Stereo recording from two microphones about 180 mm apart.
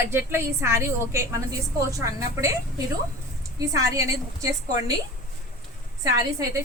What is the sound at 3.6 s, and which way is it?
A woman's voice, 20° right (ahead or behind).